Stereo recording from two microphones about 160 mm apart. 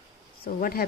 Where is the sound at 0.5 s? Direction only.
65° left (ahead or behind).